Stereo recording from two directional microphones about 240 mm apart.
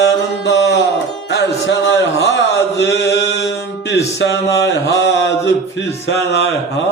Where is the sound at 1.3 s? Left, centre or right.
Left.